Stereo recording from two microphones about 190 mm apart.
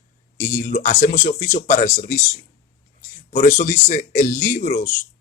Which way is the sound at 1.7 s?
40° left (ahead or behind).